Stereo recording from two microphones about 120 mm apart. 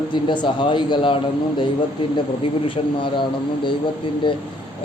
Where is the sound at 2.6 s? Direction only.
45° left (ahead or behind).